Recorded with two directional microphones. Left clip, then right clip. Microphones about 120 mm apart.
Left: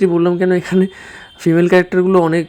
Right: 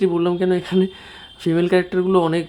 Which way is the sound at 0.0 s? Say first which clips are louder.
Left 5 dB; 35° left (ahead or behind).